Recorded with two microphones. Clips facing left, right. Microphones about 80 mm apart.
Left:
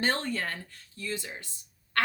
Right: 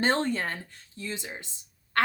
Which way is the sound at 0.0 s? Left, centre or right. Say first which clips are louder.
Right 4 dB; right.